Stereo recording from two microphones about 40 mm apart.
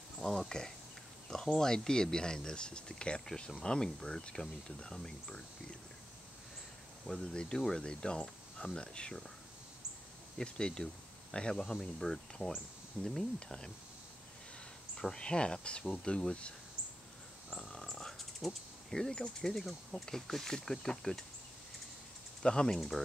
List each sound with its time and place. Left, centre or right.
0.5 s speech: centre
7.1 s speech: centre
10.3 s speech: left
15.0 s speech: centre
17.6 s a sound: centre
20.1 s speech: centre
22.4 s speech: centre
22.8 s speech: centre